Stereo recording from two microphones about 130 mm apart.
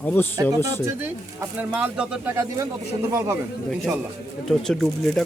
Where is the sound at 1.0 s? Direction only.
15° right (ahead or behind).